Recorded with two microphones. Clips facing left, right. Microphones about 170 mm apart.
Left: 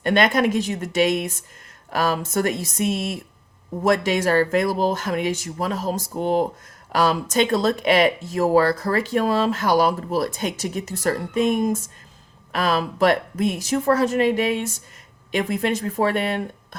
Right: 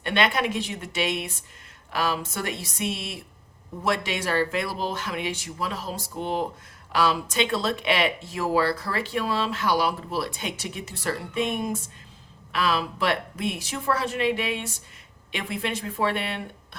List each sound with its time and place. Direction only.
0.0 s speech: 45° left (ahead or behind)